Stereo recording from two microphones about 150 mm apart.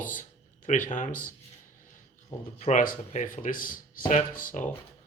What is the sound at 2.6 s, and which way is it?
Speech, 55° left (ahead or behind).